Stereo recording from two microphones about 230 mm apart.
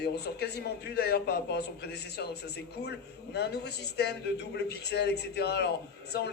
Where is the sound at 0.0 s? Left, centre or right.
Left.